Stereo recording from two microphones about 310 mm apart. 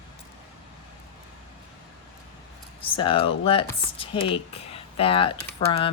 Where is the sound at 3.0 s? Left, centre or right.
Centre.